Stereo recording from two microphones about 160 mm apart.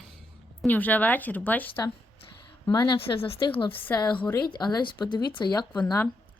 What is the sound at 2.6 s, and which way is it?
Speech, 25° left (ahead or behind).